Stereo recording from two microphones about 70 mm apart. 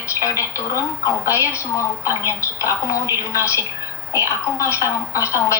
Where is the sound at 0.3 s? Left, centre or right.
Left.